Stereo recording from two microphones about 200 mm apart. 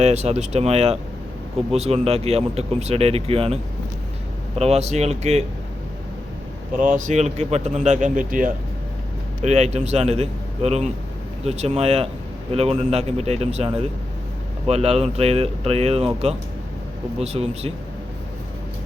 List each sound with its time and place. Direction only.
0.0 s speech: 35° right (ahead or behind)
6.7 s speech: 40° right (ahead or behind)
14.7 s speech: 30° right (ahead or behind)